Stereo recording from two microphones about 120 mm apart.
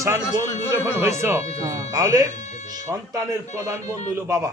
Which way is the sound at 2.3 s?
70° left (ahead or behind).